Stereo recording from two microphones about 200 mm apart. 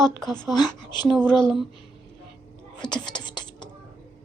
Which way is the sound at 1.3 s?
20° left (ahead or behind).